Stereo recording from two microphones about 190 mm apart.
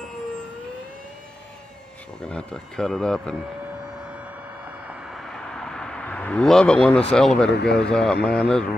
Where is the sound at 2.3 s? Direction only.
5° left (ahead or behind).